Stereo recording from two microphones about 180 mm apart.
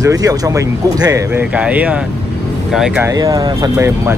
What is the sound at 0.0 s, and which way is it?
Speech, 20° right (ahead or behind).